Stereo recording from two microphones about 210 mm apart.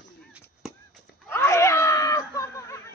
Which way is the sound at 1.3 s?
10° left (ahead or behind).